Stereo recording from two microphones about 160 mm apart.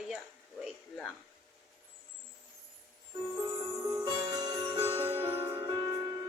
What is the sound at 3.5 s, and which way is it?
Music, 15° right (ahead or behind).